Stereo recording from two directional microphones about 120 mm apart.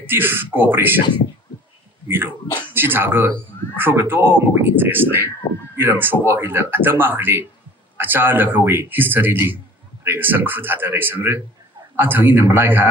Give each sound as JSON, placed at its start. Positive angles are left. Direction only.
{"t": 0.0, "sound": "speech", "side_deg": -15}
{"t": 2.0, "sound": "speech", "side_deg": -20}